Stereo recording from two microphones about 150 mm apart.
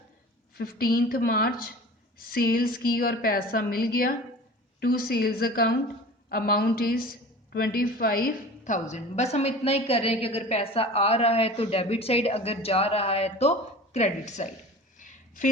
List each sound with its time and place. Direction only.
0.6 s a woman's voice: 85° left; by 14.4 s 50° left (ahead or behind)